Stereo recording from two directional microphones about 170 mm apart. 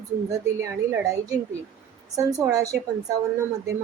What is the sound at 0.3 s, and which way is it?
A woman's voice, 20° right (ahead or behind).